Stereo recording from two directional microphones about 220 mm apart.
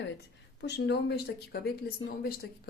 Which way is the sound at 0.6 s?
50° left (ahead or behind).